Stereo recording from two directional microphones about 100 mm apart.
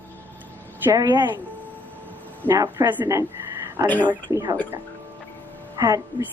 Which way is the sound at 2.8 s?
35° right (ahead or behind).